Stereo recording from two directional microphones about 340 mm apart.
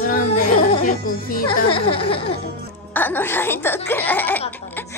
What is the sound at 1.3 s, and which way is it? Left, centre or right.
A child's voice, centre.